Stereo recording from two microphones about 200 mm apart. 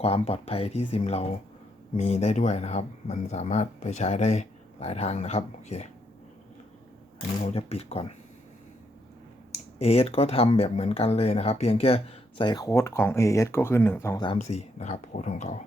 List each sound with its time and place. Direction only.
0.0 s speech: 30° left (ahead or behind)
7.4 s speech: 30° left (ahead or behind)
9.7 s speech: 30° left (ahead or behind)
14.3 s speech: 35° left (ahead or behind)